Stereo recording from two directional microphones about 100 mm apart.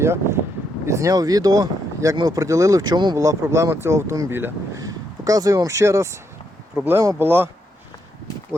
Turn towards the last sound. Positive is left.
turn(degrees=-20)  # may be behind; listen again after turning